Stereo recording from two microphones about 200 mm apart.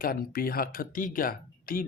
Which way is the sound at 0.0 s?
50° left (ahead or behind).